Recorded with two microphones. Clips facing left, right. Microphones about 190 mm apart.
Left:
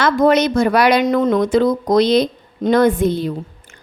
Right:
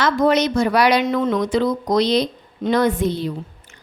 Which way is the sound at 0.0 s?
50° left (ahead or behind).